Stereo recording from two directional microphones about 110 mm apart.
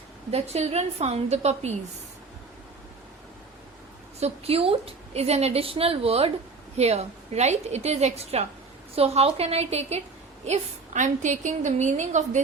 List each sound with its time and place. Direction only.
0.3 s a woman's voice: 75° right (ahead or behind)
4.2 s a woman's voice: 65° right (ahead or behind)
6.7 s a woman's voice: 75° right (ahead or behind)
10.4 s a woman's voice: 90° right